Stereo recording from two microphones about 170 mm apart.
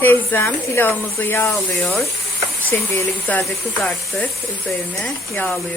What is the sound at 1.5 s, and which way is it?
Speech, centre (ahead or behind).